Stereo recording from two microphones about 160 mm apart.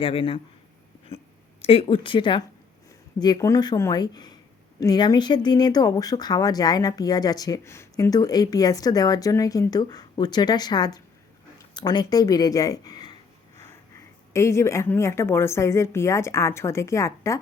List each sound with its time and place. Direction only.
0.0 s speech: 35° left (ahead or behind)
1.6 s speech: 35° left (ahead or behind)
14.3 s a woman's voice: 20° left (ahead or behind)